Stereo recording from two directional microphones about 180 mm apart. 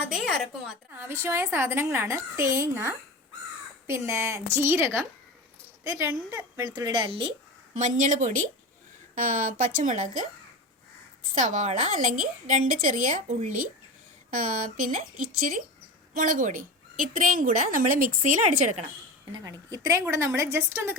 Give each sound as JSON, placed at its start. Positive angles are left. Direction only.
{"t": 0.1, "sound": "a woman's voice", "side_deg": 0}
{"t": 0.9, "sound": "a woman's voice", "side_deg": -15}
{"t": 11.3, "sound": "a woman's voice", "side_deg": -45}
{"t": 19.3, "sound": "a woman's voice", "side_deg": -20}